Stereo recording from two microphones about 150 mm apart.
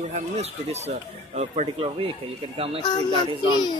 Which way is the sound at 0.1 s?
45° right (ahead or behind).